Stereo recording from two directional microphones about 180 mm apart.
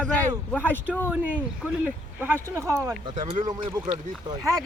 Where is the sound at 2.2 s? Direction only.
15° right (ahead or behind).